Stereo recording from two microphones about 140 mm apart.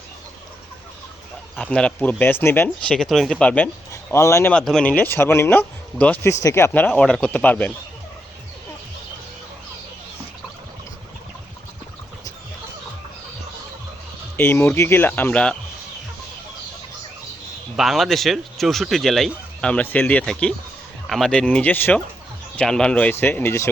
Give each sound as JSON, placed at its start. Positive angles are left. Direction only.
{"t": 1.6, "sound": "speech", "side_deg": 10}
{"t": 2.6, "sound": "speech", "side_deg": 5}
{"t": 4.1, "sound": "speech", "side_deg": 20}
{"t": 4.5, "sound": "speech", "side_deg": 5}
{"t": 14.3, "sound": "speech", "side_deg": 15}
{"t": 17.7, "sound": "speech", "side_deg": 0}